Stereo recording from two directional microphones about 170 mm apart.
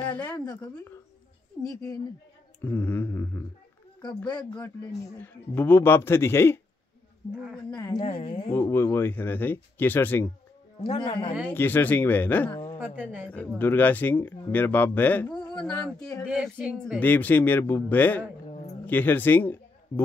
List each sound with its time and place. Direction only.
0.0 s a woman's voice: 10° left (ahead or behind)
1.7 s a man's voice: 20° left (ahead or behind)
4.3 s a man's voice: 25° left (ahead or behind)
5.1 s speech: 10° left (ahead or behind)
7.7 s a man's voice: 20° left (ahead or behind)
8.0 s a woman's voice: 35° left (ahead or behind)
8.5 s speech: 15° left (ahead or behind)
11.0 s a man's voice: 30° left (ahead or behind)
11.4 s speech: 10° left (ahead or behind)
12.9 s speech: 10° right (ahead or behind)
13.6 s speech: 10° left (ahead or behind)
16.3 s speech: 5° right (ahead or behind)
17.0 s speech: 10° left (ahead or behind)